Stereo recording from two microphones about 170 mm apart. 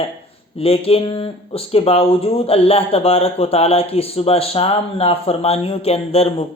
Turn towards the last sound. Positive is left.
turn(degrees=35)  # may be behind; listen again after turning